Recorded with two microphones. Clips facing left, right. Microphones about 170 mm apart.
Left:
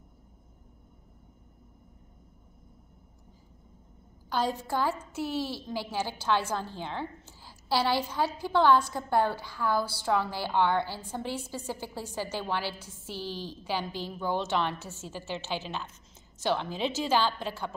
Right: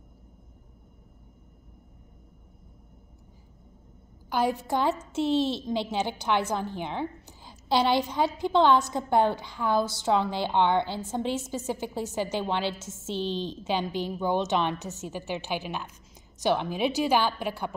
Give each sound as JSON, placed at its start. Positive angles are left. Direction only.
{"t": 4.3, "sound": "a woman's voice", "side_deg": -10}